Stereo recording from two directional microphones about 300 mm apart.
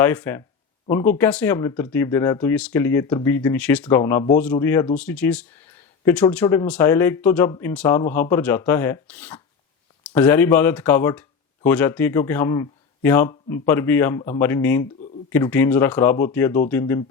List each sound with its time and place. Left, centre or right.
0.0 s speech: centre